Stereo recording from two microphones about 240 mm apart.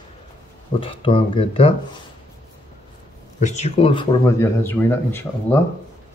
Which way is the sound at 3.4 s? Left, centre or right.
Left.